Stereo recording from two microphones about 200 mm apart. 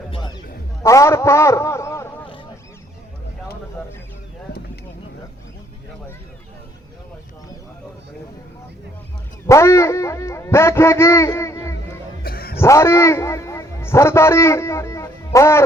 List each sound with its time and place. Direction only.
0.8 s a man's voice: 15° left (ahead or behind)
9.5 s speech: 15° left (ahead or behind)
12.2 s a sound: 50° left (ahead or behind)
12.5 s a man's voice: 15° left (ahead or behind)